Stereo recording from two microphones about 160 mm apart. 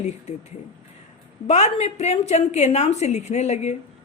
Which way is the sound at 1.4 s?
45° left (ahead or behind).